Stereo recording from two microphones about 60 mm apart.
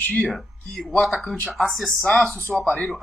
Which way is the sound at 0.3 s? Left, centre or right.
Centre.